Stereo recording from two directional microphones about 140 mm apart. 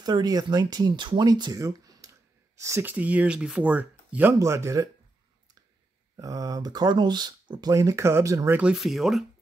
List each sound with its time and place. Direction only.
0.0 s speech: 30° right (ahead or behind)
6.1 s speech: 25° right (ahead or behind)
8.5 s speech: 5° right (ahead or behind)